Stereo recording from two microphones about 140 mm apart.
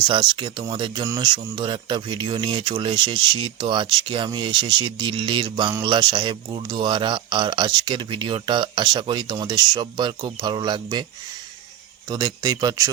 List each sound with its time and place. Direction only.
0.1 s speech: 35° right (ahead or behind)
12.0 s speech: 30° right (ahead or behind)